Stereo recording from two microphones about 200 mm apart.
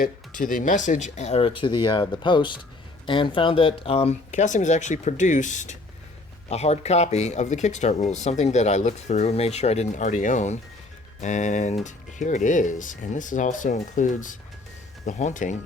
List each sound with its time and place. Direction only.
0.0 s speech: 45° left (ahead or behind)